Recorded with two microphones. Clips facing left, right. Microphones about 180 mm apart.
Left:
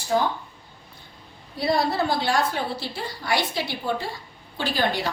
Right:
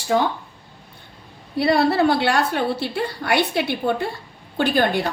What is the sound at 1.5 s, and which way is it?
A woman's voice, 65° right (ahead or behind).